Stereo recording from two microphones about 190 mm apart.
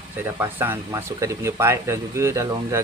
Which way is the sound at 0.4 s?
10° right (ahead or behind).